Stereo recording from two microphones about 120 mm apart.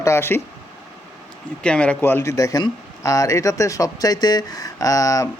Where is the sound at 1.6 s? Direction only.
10° left (ahead or behind).